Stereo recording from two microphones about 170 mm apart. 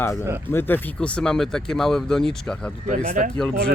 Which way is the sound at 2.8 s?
50° right (ahead or behind).